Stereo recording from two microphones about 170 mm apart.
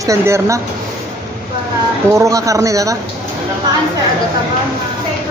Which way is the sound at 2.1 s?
20° right (ahead or behind).